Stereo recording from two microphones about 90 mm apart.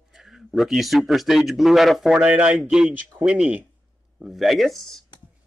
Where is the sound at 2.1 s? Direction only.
10° right (ahead or behind); by 5.1 s 5° left (ahead or behind).